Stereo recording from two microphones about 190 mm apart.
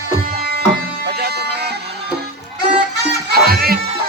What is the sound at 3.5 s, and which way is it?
Music, 50° right (ahead or behind).